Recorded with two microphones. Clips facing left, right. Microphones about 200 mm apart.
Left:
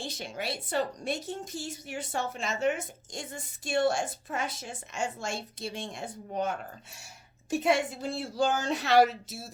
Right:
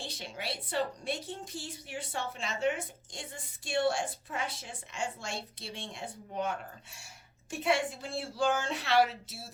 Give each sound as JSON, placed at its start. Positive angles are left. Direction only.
{"t": 0.0, "sound": "a woman's voice", "side_deg": 45}
{"t": 7.5, "sound": "a woman's voice", "side_deg": 40}